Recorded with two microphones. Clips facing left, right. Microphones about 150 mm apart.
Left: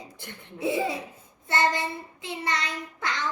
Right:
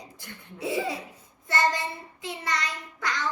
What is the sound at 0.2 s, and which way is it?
A child's voice, 25° left (ahead or behind).